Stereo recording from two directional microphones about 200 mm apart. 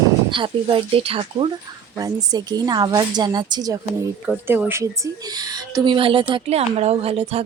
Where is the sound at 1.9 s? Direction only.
20° right (ahead or behind).